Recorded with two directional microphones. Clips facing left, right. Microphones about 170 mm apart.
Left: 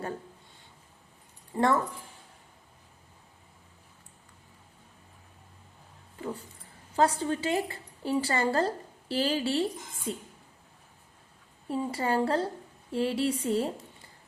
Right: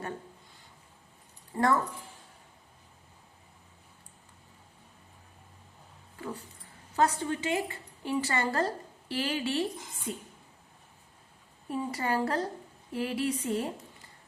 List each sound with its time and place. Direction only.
1.5 s a woman's voice: 25° left (ahead or behind)
6.9 s a woman's voice: 30° left (ahead or behind)
11.7 s a woman's voice: 30° left (ahead or behind)